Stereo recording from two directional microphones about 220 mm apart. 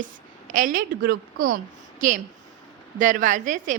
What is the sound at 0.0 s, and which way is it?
A woman's voice, 35° right (ahead or behind).